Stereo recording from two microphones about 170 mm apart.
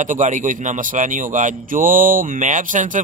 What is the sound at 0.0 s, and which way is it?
Speech, 45° right (ahead or behind).